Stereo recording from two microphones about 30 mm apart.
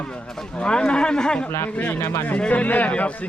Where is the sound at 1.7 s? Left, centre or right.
Left.